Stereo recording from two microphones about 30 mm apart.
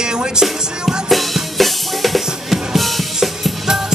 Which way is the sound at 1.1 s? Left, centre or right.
Centre.